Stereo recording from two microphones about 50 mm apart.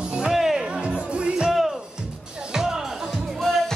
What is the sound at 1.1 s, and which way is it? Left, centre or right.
Music, centre.